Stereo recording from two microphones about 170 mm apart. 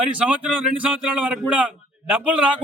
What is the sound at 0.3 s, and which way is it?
A man's voice, 5° right (ahead or behind).